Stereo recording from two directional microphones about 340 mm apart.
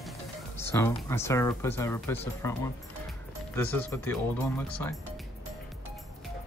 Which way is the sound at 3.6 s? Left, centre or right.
Centre.